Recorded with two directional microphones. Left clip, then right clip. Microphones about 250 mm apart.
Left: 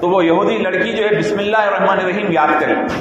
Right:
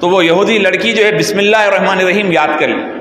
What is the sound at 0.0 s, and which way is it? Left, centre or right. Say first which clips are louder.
A man's voice: right 3 dB; right.